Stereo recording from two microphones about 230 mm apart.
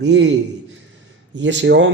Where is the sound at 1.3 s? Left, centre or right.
Right.